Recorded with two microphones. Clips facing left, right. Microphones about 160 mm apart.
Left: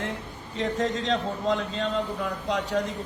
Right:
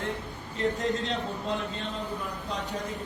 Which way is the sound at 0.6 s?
90° left.